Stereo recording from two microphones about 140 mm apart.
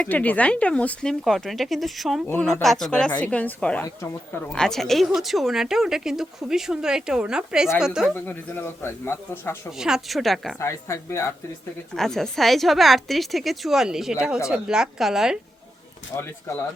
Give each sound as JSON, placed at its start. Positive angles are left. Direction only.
{"t": 0.0, "sound": "a woman's voice", "side_deg": 10}
{"t": 2.2, "sound": "a man's voice", "side_deg": 15}
{"t": 2.5, "sound": "a man's voice", "side_deg": 0}
{"t": 8.1, "sound": "a man's voice", "side_deg": 15}
{"t": 9.7, "sound": "a woman's voice", "side_deg": -5}
{"t": 10.6, "sound": "speech", "side_deg": 20}
{"t": 11.9, "sound": "a woman's voice", "side_deg": 5}
{"t": 16.1, "sound": "a man's voice", "side_deg": 15}